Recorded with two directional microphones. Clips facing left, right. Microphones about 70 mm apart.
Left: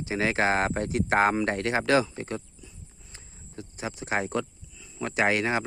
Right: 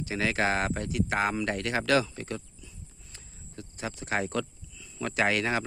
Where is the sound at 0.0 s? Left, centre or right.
Left.